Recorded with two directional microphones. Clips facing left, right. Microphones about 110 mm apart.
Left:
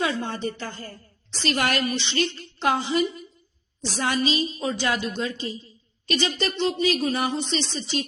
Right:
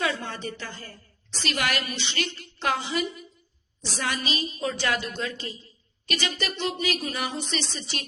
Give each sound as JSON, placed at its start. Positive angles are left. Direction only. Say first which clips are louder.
{"t": 0.0, "sound": "speech", "louder": "left 3 dB", "side_deg": 30}
{"t": 2.0, "sound": "a woman's voice", "louder": "left 5 dB", "side_deg": 30}